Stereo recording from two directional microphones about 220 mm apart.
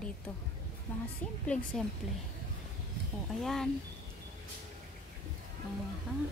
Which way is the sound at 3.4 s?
Centre (ahead or behind).